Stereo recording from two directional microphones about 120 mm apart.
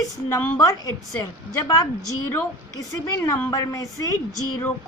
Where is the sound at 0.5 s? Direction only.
30° left (ahead or behind).